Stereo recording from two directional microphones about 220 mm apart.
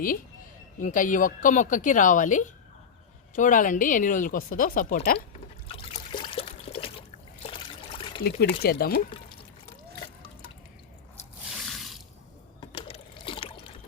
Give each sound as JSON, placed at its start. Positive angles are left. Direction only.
{"t": 0.8, "sound": "speech", "side_deg": 35}
{"t": 5.6, "sound": "trickle", "side_deg": 25}
{"t": 7.4, "sound": "water", "side_deg": 25}
{"t": 8.2, "sound": "speech", "side_deg": 45}
{"t": 11.5, "sound": "water", "side_deg": 0}
{"t": 12.5, "sound": "a sound", "side_deg": 25}